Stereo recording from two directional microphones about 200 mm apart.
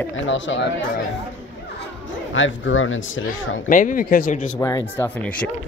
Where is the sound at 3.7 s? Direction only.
40° left (ahead or behind).